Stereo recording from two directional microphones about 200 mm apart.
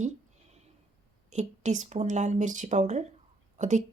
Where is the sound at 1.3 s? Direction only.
35° right (ahead or behind).